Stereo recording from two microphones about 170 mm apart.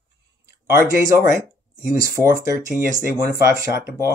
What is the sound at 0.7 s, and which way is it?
Speech, 15° right (ahead or behind).